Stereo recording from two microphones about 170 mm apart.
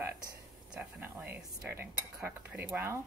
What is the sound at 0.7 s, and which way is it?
Speech, 10° right (ahead or behind).